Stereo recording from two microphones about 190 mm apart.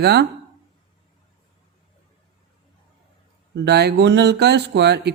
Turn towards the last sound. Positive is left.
turn(degrees=-60)  # may be behind; listen again after turning